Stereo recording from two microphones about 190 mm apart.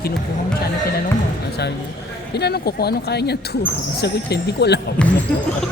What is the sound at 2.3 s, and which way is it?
Speech, 60° left (ahead or behind).